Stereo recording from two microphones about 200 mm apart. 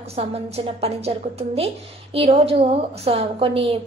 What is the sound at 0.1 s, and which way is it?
A woman's voice, 30° right (ahead or behind).